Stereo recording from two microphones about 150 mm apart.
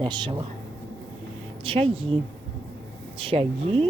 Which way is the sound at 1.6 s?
35° right (ahead or behind).